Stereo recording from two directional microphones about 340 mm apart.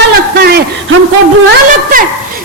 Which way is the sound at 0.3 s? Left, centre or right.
Right.